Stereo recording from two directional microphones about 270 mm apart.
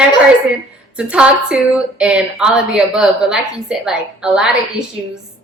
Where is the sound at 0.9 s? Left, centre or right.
Centre.